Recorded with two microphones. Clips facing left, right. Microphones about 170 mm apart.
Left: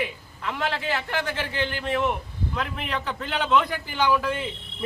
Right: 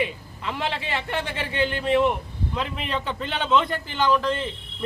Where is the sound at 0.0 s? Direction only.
Centre (ahead or behind).